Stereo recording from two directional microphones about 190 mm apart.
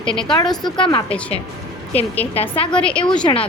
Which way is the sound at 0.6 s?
25° left (ahead or behind).